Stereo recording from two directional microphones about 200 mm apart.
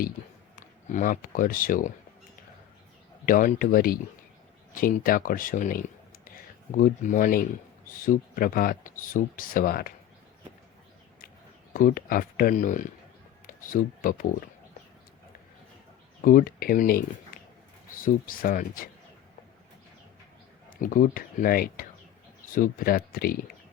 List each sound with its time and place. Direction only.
0.9 s speech: 40° left (ahead or behind)
3.2 s speech: 45° left (ahead or behind)
11.7 s speech: 45° left (ahead or behind)
16.2 s speech: 45° left (ahead or behind)
20.7 s speech: 45° left (ahead or behind)